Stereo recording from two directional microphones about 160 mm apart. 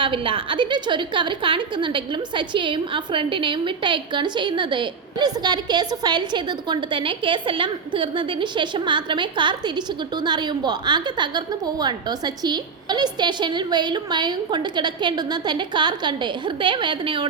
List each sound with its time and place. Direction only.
0.0 s a woman's voice: 35° right (ahead or behind)